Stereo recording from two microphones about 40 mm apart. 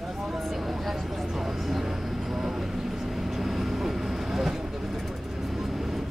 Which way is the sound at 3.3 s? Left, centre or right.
Centre.